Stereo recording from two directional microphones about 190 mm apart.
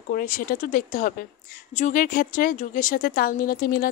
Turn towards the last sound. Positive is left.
turn(degrees=55)  # may be behind; listen again after turning